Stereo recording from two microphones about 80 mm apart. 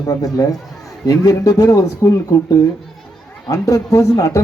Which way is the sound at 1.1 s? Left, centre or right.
Left.